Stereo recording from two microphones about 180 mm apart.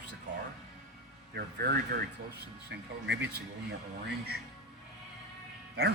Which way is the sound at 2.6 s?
70° right (ahead or behind).